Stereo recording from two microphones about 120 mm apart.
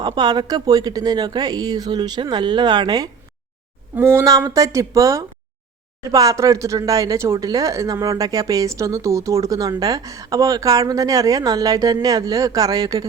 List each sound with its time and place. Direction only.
0.0 s a woman's voice: 35° right (ahead or behind)
3.9 s a woman's voice: 20° right (ahead or behind)